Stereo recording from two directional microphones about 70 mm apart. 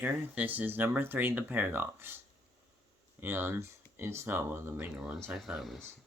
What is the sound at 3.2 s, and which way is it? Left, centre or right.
Speech, right.